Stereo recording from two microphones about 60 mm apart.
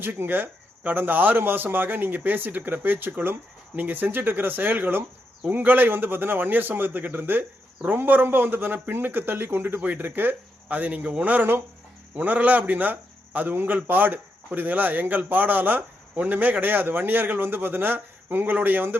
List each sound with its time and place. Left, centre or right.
0.0 s a man's voice: right